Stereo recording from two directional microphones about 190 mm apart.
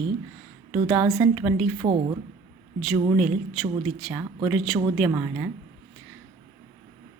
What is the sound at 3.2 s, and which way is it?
A woman's voice, centre (ahead or behind).